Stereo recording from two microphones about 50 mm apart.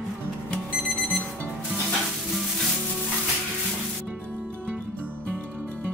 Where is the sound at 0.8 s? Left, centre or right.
Right.